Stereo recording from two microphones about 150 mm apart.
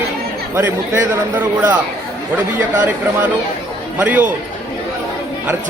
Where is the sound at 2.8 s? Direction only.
10° right (ahead or behind).